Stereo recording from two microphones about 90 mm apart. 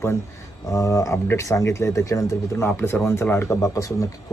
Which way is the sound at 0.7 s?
35° left (ahead or behind).